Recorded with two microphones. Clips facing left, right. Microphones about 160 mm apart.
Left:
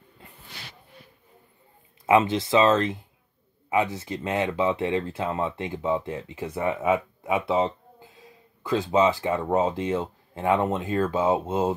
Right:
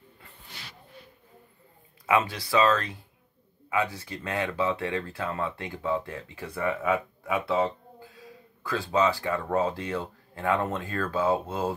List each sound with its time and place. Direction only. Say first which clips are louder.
2.0 s speech: left 5 dB; 25° left (ahead or behind)